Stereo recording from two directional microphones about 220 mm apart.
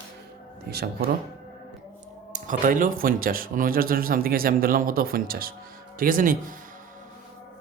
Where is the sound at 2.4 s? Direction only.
35° right (ahead or behind).